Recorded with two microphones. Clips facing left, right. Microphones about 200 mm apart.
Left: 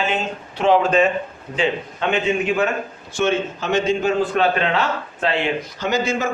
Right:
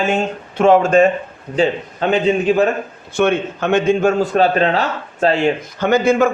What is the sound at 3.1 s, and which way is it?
A man's voice, 60° right (ahead or behind).